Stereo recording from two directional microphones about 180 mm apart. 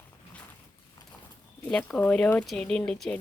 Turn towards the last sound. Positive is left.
turn(degrees=5)  # may be behind; listen again after turning